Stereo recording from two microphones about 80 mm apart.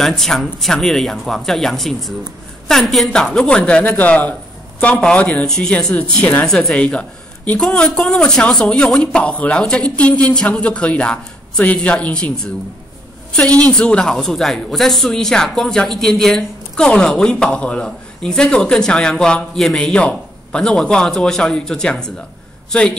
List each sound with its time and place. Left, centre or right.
0.0 s a woman's voice: centre